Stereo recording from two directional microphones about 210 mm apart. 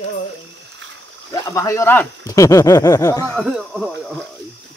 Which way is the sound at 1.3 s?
15° left (ahead or behind).